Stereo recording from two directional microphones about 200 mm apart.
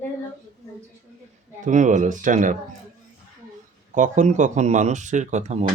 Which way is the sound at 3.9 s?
40° right (ahead or behind).